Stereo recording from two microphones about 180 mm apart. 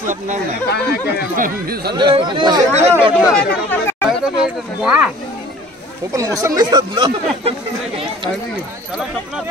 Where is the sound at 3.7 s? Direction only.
10° left (ahead or behind).